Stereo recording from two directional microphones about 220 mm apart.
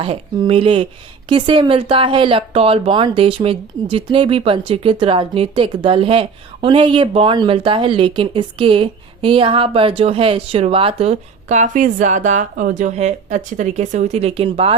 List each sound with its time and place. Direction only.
0.0 s speech: 25° right (ahead or behind)